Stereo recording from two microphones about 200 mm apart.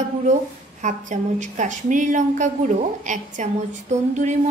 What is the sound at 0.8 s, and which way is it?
A woman's voice, 40° right (ahead or behind).